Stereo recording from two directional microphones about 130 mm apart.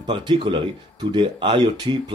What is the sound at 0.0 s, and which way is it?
Speech, 35° right (ahead or behind).